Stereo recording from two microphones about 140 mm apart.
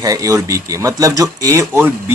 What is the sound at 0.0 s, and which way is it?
Speech, 25° right (ahead or behind).